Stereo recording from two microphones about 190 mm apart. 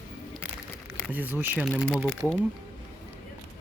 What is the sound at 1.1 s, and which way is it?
Speech, 10° right (ahead or behind).